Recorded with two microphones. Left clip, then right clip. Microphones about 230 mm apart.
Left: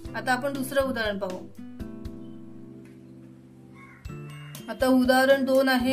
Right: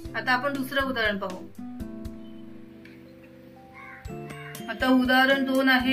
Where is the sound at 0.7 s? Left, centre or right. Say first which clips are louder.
Left 2 dB; left.